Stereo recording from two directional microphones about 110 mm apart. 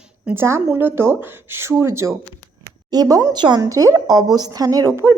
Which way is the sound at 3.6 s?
30° right (ahead or behind).